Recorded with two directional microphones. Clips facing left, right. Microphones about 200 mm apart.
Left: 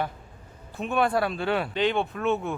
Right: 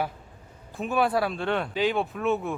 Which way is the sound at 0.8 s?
Centre (ahead or behind).